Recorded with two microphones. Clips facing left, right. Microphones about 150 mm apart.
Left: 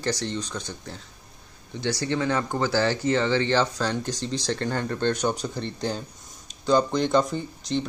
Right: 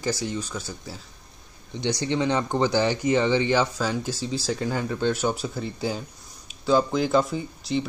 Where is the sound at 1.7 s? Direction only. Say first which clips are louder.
Right 1 dB; 20° right (ahead or behind).